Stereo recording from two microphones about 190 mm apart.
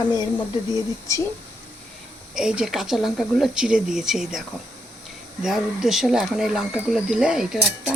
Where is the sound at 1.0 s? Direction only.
15° left (ahead or behind).